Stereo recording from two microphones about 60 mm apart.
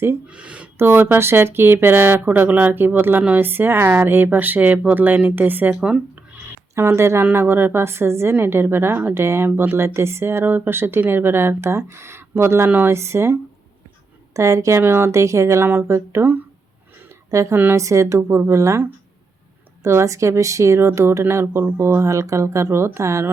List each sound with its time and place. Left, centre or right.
0.3 s speech: right
0.8 s speech: right
6.7 s speech: right
7.3 s speech: right
14.3 s speech: right
14.8 s speech: right
15.1 s speech: right
15.6 s speech: right
17.5 s speech: right
17.7 s speech: right
19.8 s speech: right